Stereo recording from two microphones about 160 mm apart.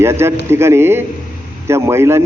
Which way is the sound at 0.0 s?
15° right (ahead or behind).